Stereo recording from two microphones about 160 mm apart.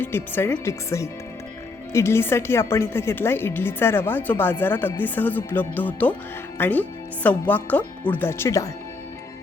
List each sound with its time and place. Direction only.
0.0 s a woman's voice: 15° left (ahead or behind)